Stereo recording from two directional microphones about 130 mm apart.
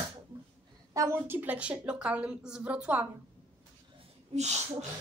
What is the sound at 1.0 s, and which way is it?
A woman's voice, 20° right (ahead or behind).